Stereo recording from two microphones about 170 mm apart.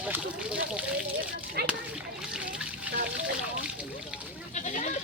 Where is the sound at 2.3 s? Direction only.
5° right (ahead or behind).